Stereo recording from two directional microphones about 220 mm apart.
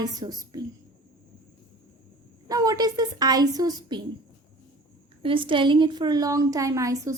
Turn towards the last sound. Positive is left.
turn(degrees=-15)  # may be behind; listen again after turning